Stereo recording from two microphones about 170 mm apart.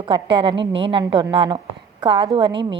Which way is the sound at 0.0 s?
30° right (ahead or behind).